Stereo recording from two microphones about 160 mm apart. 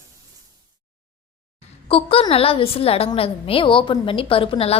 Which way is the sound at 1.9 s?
35° left (ahead or behind).